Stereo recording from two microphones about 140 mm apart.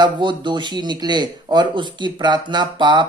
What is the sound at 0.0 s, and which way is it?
A man's voice, 35° right (ahead or behind).